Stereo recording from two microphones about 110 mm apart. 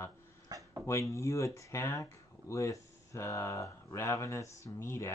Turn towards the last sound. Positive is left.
turn(degrees=25)  # may be behind; listen again after turning